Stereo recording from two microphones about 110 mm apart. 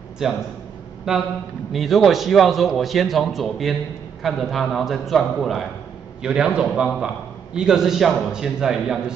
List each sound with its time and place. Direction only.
0.2 s a man's voice: 5° right (ahead or behind)